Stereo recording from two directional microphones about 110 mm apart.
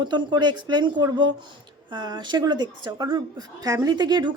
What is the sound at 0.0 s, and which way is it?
Speech, 40° right (ahead or behind).